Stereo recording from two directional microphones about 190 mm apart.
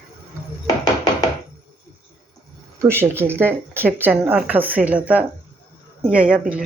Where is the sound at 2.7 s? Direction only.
10° right (ahead or behind).